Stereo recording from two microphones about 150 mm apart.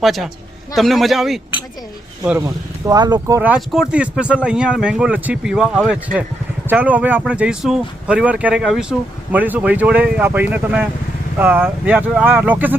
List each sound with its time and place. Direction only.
0.0 s a man's voice: centre (ahead or behind)
2.4 s speech: 25° right (ahead or behind)
3.5 s speech: 5° right (ahead or behind)